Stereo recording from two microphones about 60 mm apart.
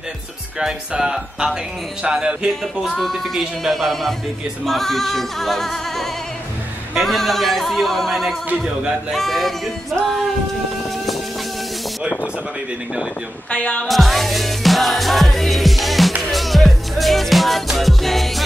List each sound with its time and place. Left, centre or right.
0.6 s speech: centre
13.5 s music: centre
13.8 s music: centre